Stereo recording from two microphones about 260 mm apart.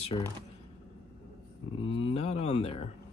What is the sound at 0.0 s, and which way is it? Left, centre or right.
Speech, left.